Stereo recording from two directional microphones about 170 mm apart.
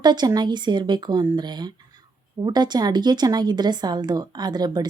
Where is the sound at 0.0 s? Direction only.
25° right (ahead or behind).